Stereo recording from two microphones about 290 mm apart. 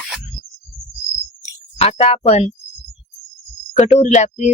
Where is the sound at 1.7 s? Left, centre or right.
Left.